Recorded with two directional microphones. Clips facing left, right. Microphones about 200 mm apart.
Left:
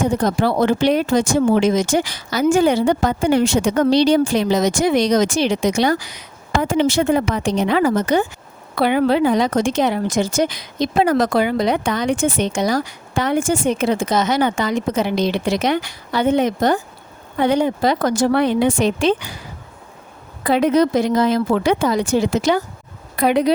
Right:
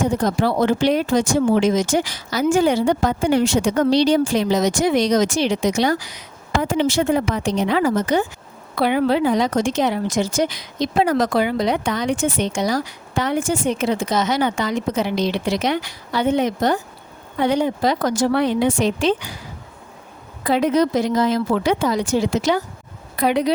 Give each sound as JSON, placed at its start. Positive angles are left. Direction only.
{"t": 0.2, "sound": "speech", "side_deg": 60}
{"t": 20.4, "sound": "speech", "side_deg": 60}